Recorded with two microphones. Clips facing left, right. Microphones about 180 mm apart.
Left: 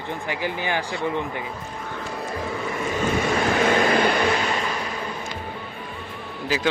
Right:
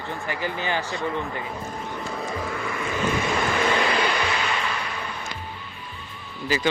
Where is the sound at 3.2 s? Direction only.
45° left (ahead or behind).